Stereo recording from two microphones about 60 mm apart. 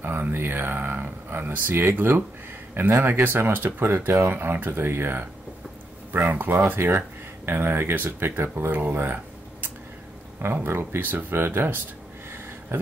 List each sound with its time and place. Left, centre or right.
0.0 s speech: right